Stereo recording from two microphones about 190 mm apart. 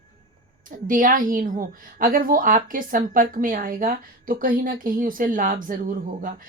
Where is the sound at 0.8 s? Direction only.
45° right (ahead or behind).